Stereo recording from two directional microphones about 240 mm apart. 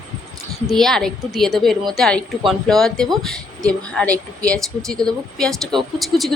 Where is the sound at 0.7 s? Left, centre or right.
Centre.